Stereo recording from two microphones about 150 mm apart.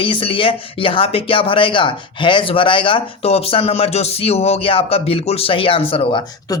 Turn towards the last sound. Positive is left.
turn(degrees=35)  # may be behind; listen again after turning